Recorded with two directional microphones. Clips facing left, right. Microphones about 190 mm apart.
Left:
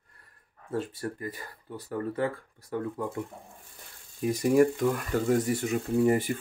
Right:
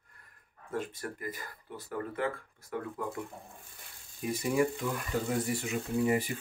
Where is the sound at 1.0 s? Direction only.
30° left (ahead or behind).